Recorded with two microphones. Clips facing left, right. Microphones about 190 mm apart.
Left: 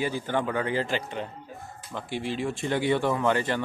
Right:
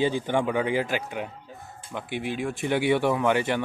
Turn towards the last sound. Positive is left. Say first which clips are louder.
# right 2 dB
turn(degrees=-10)  # may be behind; listen again after turning